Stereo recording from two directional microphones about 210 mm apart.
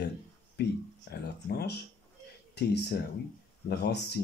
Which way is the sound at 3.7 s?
50° left (ahead or behind).